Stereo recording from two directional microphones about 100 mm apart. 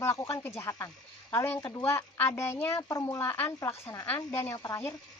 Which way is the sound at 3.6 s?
30° left (ahead or behind).